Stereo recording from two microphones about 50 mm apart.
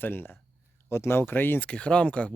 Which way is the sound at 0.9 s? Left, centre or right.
Left.